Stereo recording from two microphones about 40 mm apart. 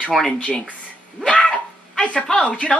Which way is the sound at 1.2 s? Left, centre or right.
Centre.